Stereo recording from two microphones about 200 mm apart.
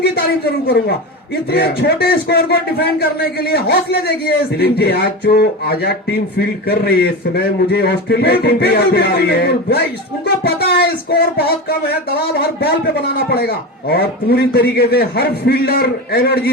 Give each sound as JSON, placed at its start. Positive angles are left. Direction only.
{"t": 1.5, "sound": "a man's voice", "side_deg": 55}
{"t": 7.3, "sound": "a man's voice", "side_deg": 55}
{"t": 13.1, "sound": "a man's voice", "side_deg": 50}